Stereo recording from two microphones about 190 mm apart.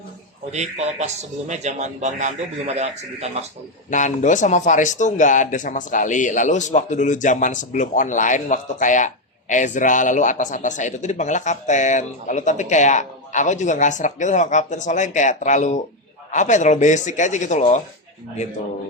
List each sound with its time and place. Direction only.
0.5 s a man's voice: 35° right (ahead or behind)
3.8 s a man's voice: 40° left (ahead or behind)